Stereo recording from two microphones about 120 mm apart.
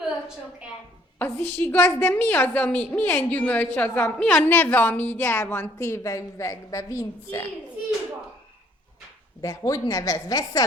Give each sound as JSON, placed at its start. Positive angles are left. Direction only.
{"t": 1.2, "sound": "a woman's voice", "side_deg": 15}
{"t": 9.4, "sound": "a woman's voice", "side_deg": 30}